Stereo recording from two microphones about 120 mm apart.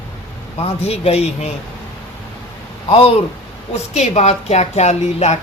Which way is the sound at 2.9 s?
50° left (ahead or behind).